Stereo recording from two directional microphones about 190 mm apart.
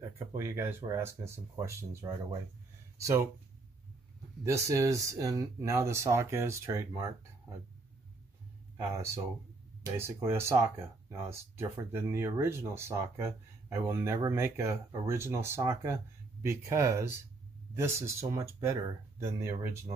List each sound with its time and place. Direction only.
0.3 s speech: 15° right (ahead or behind)
4.5 s speech: 15° right (ahead or behind)
8.9 s speech: 15° right (ahead or behind)